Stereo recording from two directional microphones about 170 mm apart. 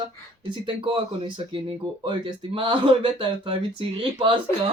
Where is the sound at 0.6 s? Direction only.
30° right (ahead or behind).